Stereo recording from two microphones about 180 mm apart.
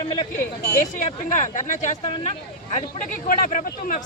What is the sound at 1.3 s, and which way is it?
Speech, 45° left (ahead or behind).